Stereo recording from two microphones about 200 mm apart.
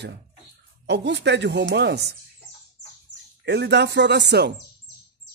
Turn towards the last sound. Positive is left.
turn(degrees=-55)  # may be behind; listen again after turning